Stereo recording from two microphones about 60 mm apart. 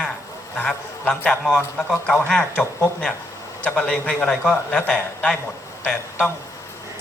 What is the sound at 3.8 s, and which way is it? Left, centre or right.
A man's voice, left.